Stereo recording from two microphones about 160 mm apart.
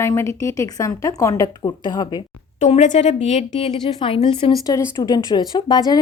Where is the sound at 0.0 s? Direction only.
20° left (ahead or behind).